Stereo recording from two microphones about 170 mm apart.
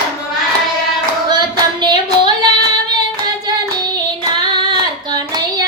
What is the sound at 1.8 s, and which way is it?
Child singing, 25° right (ahead or behind).